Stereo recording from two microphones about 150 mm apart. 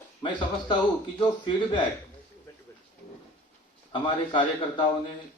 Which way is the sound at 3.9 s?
35° left (ahead or behind).